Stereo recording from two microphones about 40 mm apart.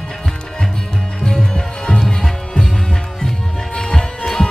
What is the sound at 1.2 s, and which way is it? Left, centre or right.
Music, centre.